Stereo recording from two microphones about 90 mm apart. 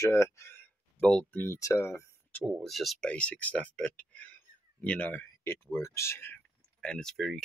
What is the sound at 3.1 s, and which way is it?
Speech, 15° left (ahead or behind).